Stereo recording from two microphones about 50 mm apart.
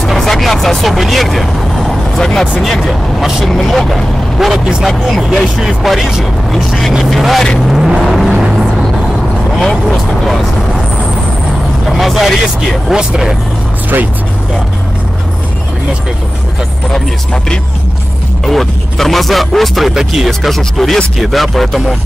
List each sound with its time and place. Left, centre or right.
0.0 s vehicle: centre
2.7 s speech: centre
8.0 s vehicle: centre
9.6 s speech: centre
11.9 s speech: centre
12.9 s speech: centre
18.4 s speech: centre